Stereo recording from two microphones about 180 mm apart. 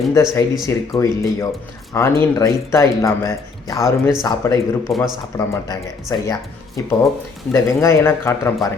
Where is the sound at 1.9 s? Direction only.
15° left (ahead or behind).